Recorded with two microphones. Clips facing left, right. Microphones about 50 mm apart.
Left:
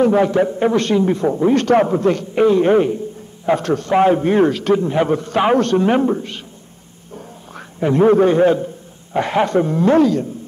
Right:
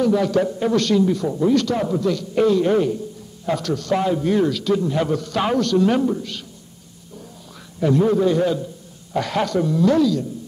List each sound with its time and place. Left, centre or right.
0.0 s a man's voice: left
7.8 s a man's voice: left